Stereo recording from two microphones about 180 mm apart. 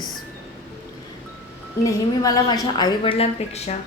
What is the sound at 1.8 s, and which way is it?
A woman's voice, 20° left (ahead or behind).